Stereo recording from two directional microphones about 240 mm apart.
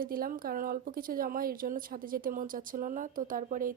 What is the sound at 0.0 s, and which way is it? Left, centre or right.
A woman's voice, right.